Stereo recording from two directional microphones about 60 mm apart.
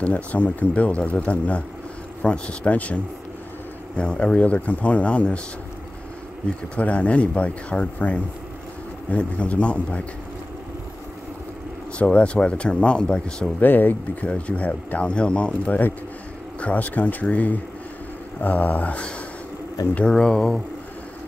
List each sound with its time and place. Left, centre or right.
0.0 s speech: left
6.8 s speech: left
12.0 s speech: left
13.6 s speech: left
20.1 s speech: centre